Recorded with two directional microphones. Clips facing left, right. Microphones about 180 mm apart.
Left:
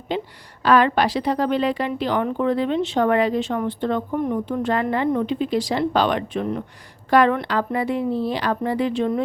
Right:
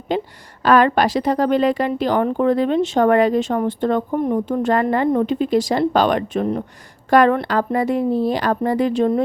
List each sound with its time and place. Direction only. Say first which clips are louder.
0.1 s a woman's voice: right 4 dB; 45° right (ahead or behind)